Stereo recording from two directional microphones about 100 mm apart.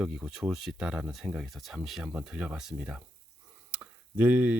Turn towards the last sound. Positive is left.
turn(degrees=-15)  # may be behind; listen again after turning